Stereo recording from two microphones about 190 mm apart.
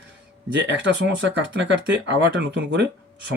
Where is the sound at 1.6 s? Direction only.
65° right (ahead or behind).